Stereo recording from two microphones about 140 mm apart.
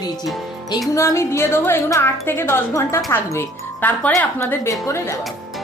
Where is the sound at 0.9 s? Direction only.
20° left (ahead or behind).